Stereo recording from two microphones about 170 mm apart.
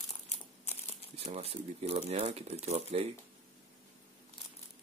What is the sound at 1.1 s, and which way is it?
Speech, 35° right (ahead or behind).